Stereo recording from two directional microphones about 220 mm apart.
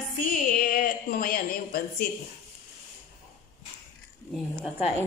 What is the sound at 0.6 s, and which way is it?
A woman's voice, 40° left (ahead or behind).